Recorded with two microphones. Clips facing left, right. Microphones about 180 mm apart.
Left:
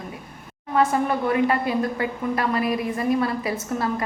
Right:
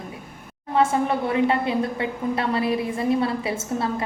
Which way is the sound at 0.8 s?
25° right (ahead or behind).